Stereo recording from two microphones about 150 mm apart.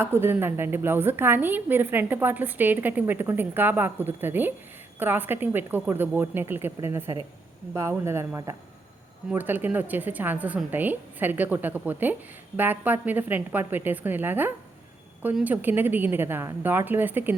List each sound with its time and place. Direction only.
0.0 s a woman's voice: 15° right (ahead or behind)